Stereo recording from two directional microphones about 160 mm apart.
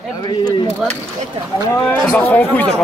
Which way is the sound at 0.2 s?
25° left (ahead or behind).